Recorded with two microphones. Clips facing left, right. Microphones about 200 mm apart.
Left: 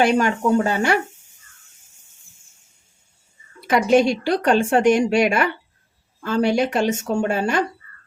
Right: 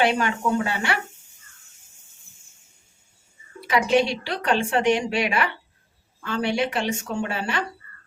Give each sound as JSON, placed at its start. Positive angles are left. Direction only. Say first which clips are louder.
{"t": 0.0, "sound": "a woman's voice", "louder": "left 4 dB", "side_deg": 45}
{"t": 3.7, "sound": "a woman's voice", "louder": "left 4 dB", "side_deg": 45}